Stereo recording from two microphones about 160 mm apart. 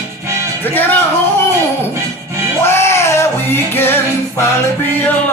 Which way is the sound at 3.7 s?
15° left (ahead or behind).